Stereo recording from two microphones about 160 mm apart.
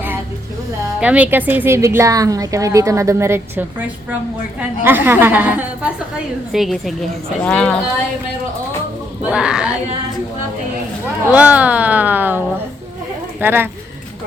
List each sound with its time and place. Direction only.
0.9 s a woman's voice: 10° right (ahead or behind)
9.2 s speech: 5° right (ahead or behind)
11.3 s a woman's voice: 10° right (ahead or behind)
13.4 s a woman's voice: 15° right (ahead or behind)